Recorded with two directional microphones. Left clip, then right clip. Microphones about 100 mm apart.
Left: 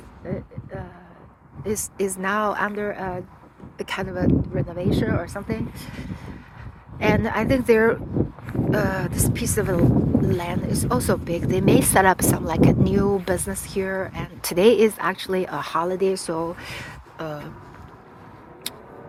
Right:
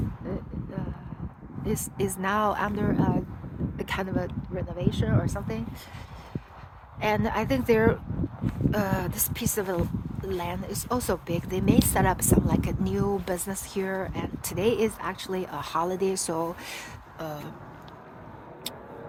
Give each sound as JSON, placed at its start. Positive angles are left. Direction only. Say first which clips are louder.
{"t": 0.3, "sound": "a sound", "louder": "left 3 dB", "side_deg": 35}
{"t": 1.6, "sound": "a woman's voice", "louder": "left 5 dB", "side_deg": 30}
{"t": 2.2, "sound": "speech", "louder": "left 2 dB", "side_deg": 20}
{"t": 4.5, "sound": "speech", "louder": "left 6 dB", "side_deg": 75}
{"t": 5.2, "sound": "speech", "louder": "left 4 dB", "side_deg": 35}
{"t": 10.3, "sound": "a woman's voice", "louder": "left 6 dB", "side_deg": 40}
{"t": 11.3, "sound": "a woman's voice", "louder": "left 6 dB", "side_deg": 35}
{"t": 11.6, "sound": "speech", "louder": "left 8 dB", "side_deg": 70}
{"t": 12.9, "sound": "a woman's voice", "louder": "left 7 dB", "side_deg": 35}
{"t": 13.5, "sound": "speech", "louder": "left 4 dB", "side_deg": 25}
{"t": 14.4, "sound": "speech", "louder": "left 10 dB", "side_deg": 90}
{"t": 15.6, "sound": "speech", "louder": "left 3 dB", "side_deg": 20}